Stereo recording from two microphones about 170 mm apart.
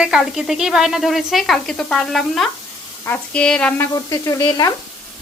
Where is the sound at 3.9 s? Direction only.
20° left (ahead or behind).